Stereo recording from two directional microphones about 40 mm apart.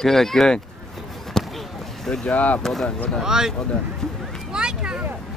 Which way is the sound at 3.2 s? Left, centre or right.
Centre.